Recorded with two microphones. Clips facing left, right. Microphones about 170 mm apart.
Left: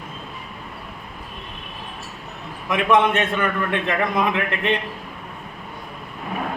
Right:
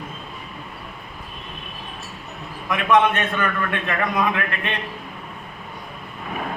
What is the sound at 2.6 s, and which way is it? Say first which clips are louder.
A man's voice: even; 20° left (ahead or behind).